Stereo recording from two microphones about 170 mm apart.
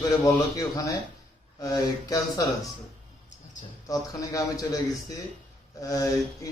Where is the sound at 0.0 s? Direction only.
20° left (ahead or behind).